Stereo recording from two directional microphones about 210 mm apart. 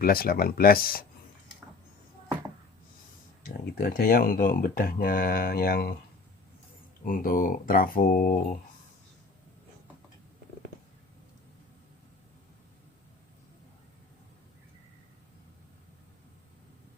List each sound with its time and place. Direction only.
0.0 s speech: 45° left (ahead or behind)
3.4 s speech: 45° left (ahead or behind)
7.0 s speech: 40° left (ahead or behind)